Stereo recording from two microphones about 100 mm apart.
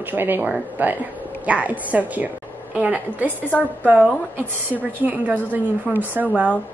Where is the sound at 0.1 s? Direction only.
20° right (ahead or behind).